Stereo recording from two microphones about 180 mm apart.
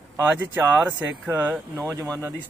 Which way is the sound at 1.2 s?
10° right (ahead or behind).